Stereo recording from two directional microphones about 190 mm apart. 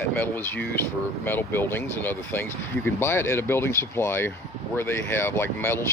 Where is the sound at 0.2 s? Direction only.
10° left (ahead or behind).